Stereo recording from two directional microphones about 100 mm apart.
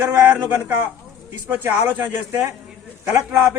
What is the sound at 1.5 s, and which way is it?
A man's voice, 20° right (ahead or behind).